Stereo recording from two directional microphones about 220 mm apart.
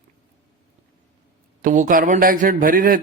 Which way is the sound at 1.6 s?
35° right (ahead or behind).